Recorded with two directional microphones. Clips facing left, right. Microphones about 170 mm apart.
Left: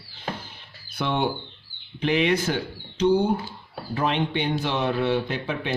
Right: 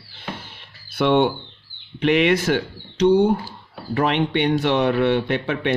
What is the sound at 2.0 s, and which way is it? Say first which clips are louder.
Speech: right 4 dB; 70° right (ahead or behind).